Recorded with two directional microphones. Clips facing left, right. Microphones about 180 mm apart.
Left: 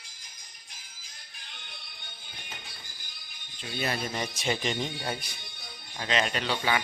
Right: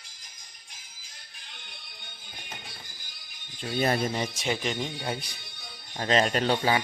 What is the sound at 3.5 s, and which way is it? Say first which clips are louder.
Speech: right 6 dB; 45° right (ahead or behind).